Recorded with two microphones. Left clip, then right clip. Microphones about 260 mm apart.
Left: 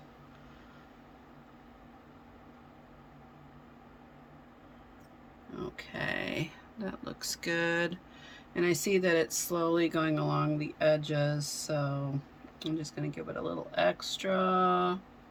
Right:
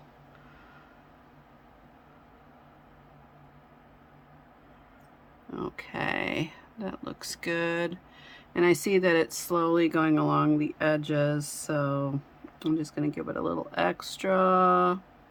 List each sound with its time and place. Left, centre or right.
5.5 s speech: centre